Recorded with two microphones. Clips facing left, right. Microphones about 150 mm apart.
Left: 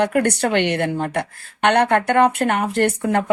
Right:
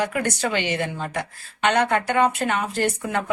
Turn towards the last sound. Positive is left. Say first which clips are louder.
# left 5 dB
turn(degrees=55)  # may be behind; listen again after turning